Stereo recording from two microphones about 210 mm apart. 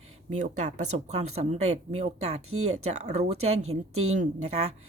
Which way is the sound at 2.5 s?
90° right.